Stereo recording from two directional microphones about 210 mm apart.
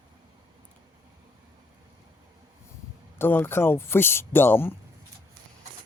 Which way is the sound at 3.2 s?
10° left (ahead or behind).